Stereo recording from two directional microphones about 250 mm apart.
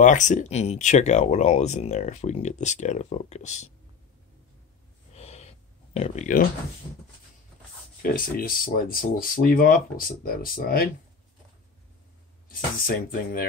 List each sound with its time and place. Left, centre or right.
0.0 s speech: left
5.1 s owl: left
5.9 s speech: left
8.0 s speech: left
12.4 s speech: left